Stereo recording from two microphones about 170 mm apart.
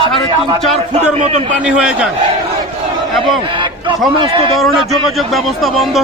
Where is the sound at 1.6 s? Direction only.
5° right (ahead or behind).